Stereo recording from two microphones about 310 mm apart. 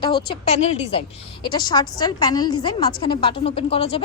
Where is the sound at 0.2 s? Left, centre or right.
Left.